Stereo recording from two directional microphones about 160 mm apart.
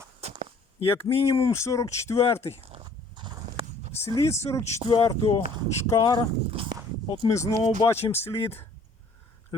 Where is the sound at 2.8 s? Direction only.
30° right (ahead or behind).